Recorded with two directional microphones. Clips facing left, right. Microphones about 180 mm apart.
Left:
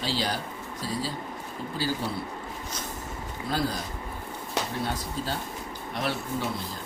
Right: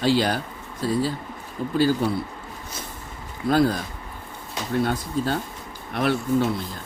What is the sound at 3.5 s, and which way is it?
Speech, 55° right (ahead or behind).